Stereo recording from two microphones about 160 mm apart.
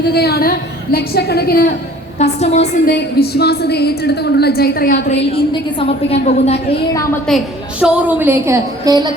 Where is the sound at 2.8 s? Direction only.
80° left.